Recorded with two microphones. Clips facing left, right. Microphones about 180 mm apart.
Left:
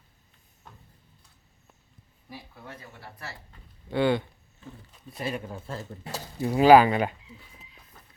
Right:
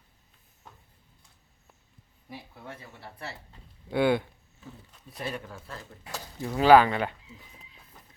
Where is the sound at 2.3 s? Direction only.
25° right (ahead or behind).